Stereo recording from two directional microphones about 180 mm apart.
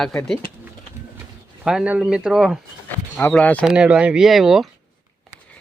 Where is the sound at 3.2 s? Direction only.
5° left (ahead or behind).